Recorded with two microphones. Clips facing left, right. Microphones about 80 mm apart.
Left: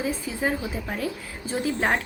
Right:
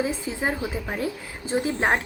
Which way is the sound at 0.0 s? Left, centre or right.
Centre.